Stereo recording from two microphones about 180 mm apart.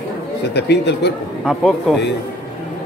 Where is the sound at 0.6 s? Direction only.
70° left (ahead or behind).